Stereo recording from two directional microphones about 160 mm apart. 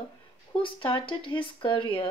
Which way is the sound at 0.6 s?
35° left (ahead or behind).